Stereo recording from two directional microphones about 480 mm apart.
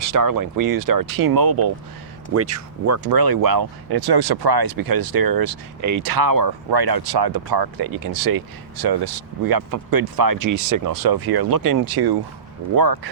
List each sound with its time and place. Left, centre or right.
0.0 s speech: right
2.3 s speech: right